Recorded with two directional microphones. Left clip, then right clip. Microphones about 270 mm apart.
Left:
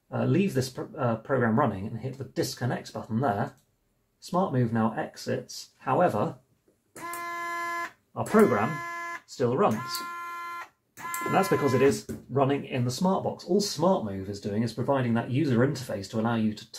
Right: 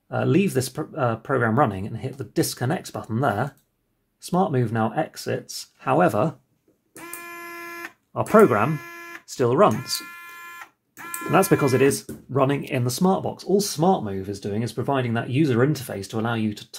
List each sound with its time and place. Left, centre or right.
0.1 s speech: right
7.2 s vehicle horn: centre
8.1 s speech: right
8.7 s a sound: centre
9.4 s speech: right
11.3 s speech: right